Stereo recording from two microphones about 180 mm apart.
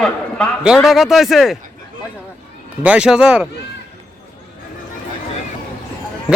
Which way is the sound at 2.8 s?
5° right (ahead or behind).